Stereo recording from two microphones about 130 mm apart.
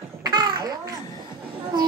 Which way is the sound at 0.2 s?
30° right (ahead or behind).